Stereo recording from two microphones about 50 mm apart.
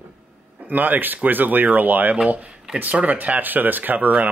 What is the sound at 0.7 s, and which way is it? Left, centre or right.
Speech, right.